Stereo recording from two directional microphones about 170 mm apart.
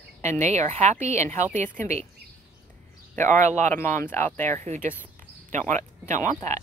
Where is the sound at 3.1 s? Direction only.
15° left (ahead or behind).